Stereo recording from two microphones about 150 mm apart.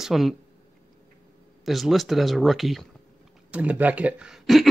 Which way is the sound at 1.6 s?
Centre (ahead or behind).